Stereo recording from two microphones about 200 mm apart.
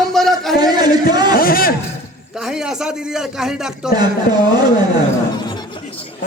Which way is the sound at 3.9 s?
20° right (ahead or behind).